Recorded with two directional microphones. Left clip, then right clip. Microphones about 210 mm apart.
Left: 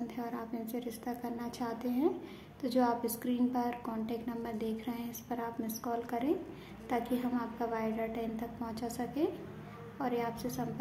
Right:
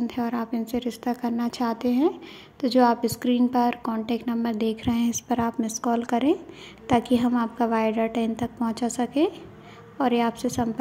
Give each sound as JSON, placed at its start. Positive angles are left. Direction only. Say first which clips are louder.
{"t": 0.0, "sound": "a woman's voice", "louder": "right 12 dB", "side_deg": -35}